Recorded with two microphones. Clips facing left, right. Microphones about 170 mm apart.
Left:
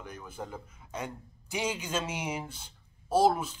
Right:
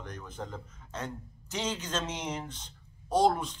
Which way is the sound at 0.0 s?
10° left (ahead or behind).